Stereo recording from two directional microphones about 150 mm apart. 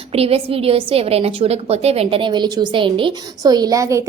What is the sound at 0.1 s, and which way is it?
A woman's voice, 40° right (ahead or behind).